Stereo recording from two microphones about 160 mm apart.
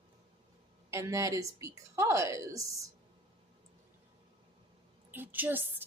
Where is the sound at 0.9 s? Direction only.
20° right (ahead or behind).